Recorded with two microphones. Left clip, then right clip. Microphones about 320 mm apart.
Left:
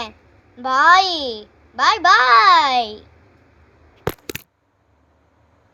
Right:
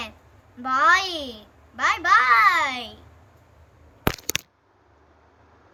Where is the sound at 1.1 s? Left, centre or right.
Centre.